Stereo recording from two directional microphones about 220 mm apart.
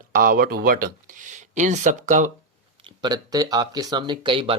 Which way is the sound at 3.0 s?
15° right (ahead or behind).